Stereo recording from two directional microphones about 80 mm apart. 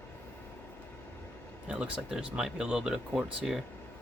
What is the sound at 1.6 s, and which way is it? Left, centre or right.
Speech, centre.